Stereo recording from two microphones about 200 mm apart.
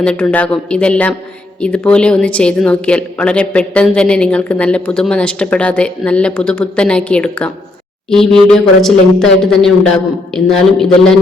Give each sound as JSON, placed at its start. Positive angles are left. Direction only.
{"t": 0.0, "sound": "a woman's voice", "side_deg": 5}